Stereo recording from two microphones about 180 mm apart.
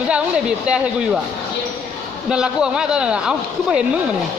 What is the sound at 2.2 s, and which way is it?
Speech, 5° right (ahead or behind).